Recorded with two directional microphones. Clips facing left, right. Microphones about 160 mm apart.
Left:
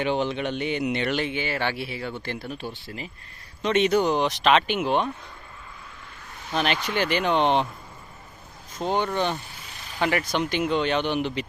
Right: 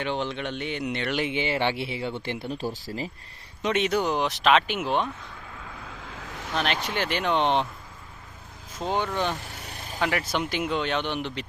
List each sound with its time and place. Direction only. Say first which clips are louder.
0.0 s speech: left 4 dB; 5° left (ahead or behind)
1.1 s speech: even; 20° right (ahead or behind); by 3.1 s 35° right (ahead or behind)
3.7 s speech: left 4 dB; centre (ahead or behind)
5.6 s vehicle: right 4 dB; 90° right
6.5 s speech: left 2 dB; centre (ahead or behind)
8.8 s speech: left 2 dB; 5° right (ahead or behind)
9.4 s vehicle: right 3 dB; 70° right (ahead or behind); by 10.0 s 50° right (ahead or behind)
10.0 s speech: left 2 dB; centre (ahead or behind)